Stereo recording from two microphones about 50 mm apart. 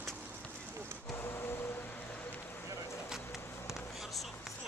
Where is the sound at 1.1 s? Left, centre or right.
Left.